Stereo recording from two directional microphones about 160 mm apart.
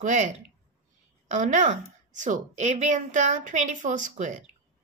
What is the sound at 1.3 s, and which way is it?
Speech, 50° right (ahead or behind).